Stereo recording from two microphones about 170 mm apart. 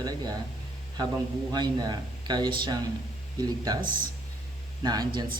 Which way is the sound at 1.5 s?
25° right (ahead or behind).